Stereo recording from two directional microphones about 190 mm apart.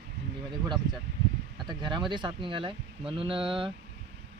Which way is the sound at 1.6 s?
25° right (ahead or behind).